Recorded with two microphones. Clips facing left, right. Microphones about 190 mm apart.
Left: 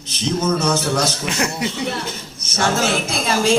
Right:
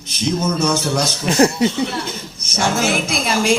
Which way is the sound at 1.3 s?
35° right (ahead or behind).